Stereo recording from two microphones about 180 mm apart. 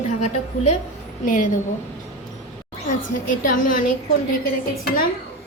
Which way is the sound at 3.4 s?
45° left (ahead or behind).